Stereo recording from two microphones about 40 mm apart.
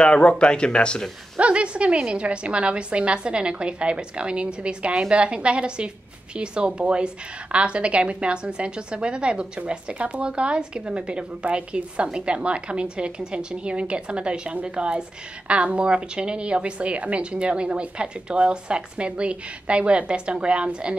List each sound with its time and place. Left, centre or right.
0.0 s speech: left
1.4 s a woman's voice: right